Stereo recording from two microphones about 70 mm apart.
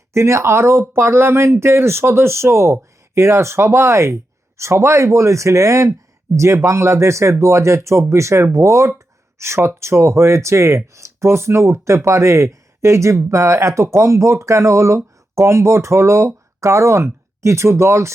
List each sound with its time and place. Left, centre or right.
0.1 s speech: right